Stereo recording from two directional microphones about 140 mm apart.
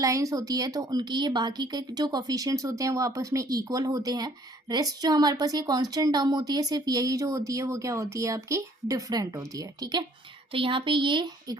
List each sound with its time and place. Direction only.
0.0 s a woman's voice: 25° right (ahead or behind)
10.5 s speech: 40° right (ahead or behind)